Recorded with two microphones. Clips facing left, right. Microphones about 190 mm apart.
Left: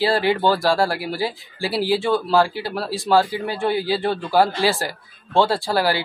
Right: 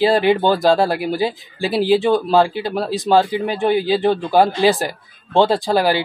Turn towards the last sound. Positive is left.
turn(degrees=-20)  # may be behind; listen again after turning